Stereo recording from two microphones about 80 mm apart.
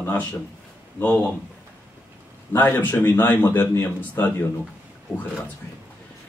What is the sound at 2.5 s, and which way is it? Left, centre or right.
Speech, left.